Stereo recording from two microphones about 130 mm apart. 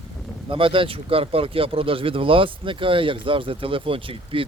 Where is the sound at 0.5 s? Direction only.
40° right (ahead or behind).